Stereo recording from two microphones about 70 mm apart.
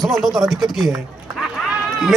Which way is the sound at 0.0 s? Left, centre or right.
Centre.